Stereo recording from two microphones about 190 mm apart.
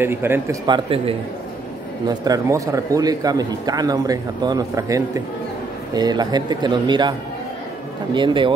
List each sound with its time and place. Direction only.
0.0 s speech: 10° right (ahead or behind)
0.7 s speech: 25° right (ahead or behind)
2.0 s speech: 20° right (ahead or behind)